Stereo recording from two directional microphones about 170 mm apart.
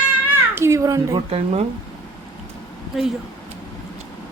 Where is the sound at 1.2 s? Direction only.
35° right (ahead or behind).